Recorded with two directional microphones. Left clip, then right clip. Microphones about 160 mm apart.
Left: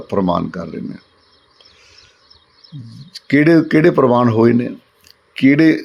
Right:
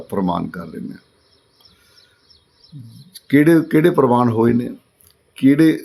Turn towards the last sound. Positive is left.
turn(degrees=20)  # may be behind; listen again after turning